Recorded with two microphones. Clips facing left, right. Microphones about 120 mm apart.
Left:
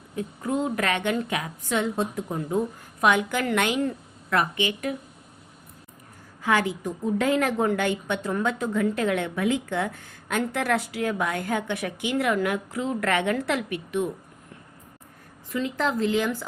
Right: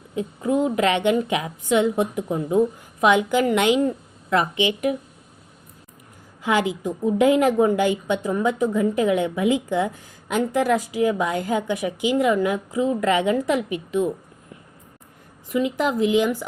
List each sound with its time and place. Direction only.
0.6 s a woman's voice: 20° right (ahead or behind)
6.4 s a woman's voice: 15° right (ahead or behind)
15.4 s a woman's voice: 15° right (ahead or behind)